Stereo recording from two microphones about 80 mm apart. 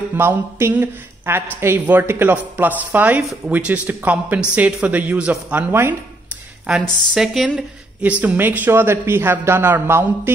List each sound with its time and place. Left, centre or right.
0.1 s speech: right
5.7 s speech: right
6.7 s speech: centre; by 10.3 s right